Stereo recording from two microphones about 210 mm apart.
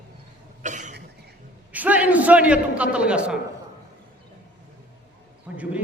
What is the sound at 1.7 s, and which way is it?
A man's voice, 5° right (ahead or behind).